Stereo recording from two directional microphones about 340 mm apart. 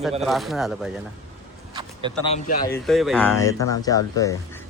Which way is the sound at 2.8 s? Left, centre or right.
Centre.